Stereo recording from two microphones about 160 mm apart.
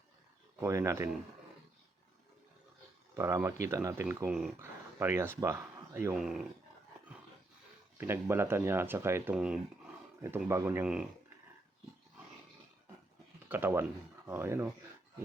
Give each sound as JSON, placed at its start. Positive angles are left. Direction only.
{"t": 0.6, "sound": "speech", "side_deg": -20}
{"t": 3.2, "sound": "speech", "side_deg": -15}
{"t": 4.3, "sound": "speech", "side_deg": -5}
{"t": 4.6, "sound": "speech", "side_deg": -15}
{"t": 6.1, "sound": "speech", "side_deg": 0}
{"t": 7.9, "sound": "speech", "side_deg": -15}
{"t": 13.5, "sound": "speech", "side_deg": -15}